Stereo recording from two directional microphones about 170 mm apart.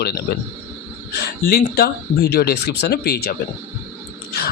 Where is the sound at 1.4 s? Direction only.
60° left (ahead or behind).